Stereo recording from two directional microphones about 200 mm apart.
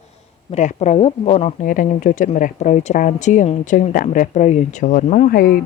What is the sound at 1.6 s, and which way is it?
Speech, 45° left (ahead or behind).